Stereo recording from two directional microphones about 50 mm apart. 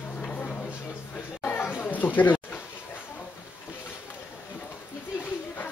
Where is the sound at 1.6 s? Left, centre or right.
Left.